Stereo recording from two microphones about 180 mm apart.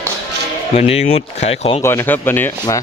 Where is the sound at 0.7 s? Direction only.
35° left (ahead or behind).